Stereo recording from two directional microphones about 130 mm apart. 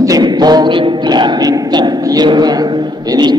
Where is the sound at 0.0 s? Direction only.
30° right (ahead or behind).